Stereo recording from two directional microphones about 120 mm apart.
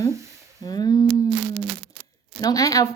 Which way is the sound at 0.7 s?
35° left (ahead or behind).